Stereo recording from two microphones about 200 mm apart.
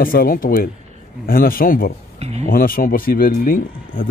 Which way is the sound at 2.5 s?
45° left (ahead or behind).